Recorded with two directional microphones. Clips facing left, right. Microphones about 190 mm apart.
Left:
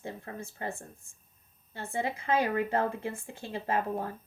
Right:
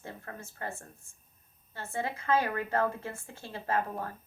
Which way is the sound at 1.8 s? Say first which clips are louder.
Left 2 dB; 15° left (ahead or behind).